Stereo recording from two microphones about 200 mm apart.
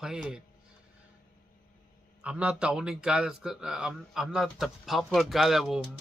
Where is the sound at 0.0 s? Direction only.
5° right (ahead or behind).